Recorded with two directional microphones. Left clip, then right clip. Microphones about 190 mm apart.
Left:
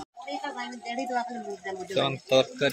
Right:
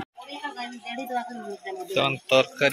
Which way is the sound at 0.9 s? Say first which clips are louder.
Left 1 dB; centre (ahead or behind).